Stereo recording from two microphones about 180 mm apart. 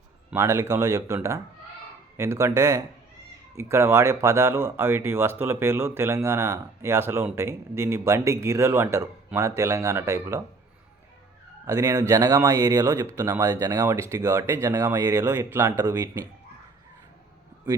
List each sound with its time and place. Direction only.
0.3 s speech: 15° right (ahead or behind)
11.6 s speech: 20° right (ahead or behind)